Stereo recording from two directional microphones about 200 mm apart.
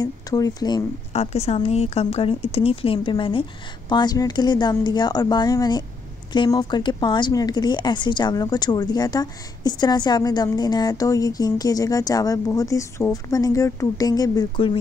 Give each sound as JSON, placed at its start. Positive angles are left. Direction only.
{"t": 0.0, "sound": "speech", "side_deg": 15}
{"t": 1.1, "sound": "speech", "side_deg": 30}